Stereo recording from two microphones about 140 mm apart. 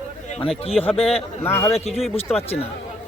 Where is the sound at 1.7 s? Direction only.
45° left (ahead or behind).